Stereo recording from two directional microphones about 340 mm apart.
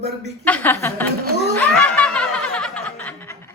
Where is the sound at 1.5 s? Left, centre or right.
Centre.